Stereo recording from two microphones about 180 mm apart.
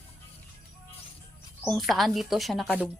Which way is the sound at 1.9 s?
Centre (ahead or behind).